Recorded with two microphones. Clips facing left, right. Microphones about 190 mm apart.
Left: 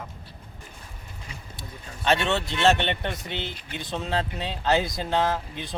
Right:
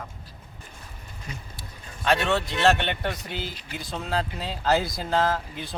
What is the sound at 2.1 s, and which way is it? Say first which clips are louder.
Speech: even; 25° left (ahead or behind).